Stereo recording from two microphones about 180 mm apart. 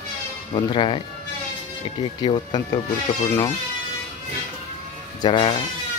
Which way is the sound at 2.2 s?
25° left (ahead or behind).